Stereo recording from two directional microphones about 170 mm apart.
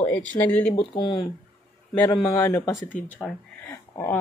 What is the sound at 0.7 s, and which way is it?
Speech, 25° left (ahead or behind).